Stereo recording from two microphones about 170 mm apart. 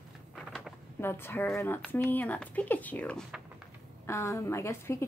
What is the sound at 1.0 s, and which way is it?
A woman's voice, 15° left (ahead or behind).